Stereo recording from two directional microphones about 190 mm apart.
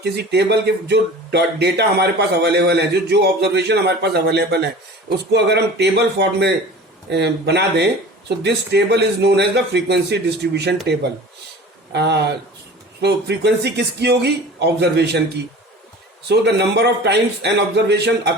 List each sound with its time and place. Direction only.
0.0 s speech: 60° right (ahead or behind)
11.9 s speech: 60° right (ahead or behind)
16.3 s speech: 60° right (ahead or behind)